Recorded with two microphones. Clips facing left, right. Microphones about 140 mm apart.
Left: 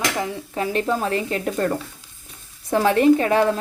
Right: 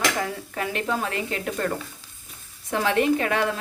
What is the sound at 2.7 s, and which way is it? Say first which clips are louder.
Speech: left 6 dB; 35° left (ahead or behind).